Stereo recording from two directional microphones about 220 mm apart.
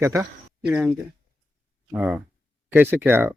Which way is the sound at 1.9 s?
5° right (ahead or behind).